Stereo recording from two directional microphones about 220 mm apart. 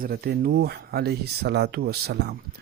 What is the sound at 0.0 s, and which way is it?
Speech, 45° right (ahead or behind).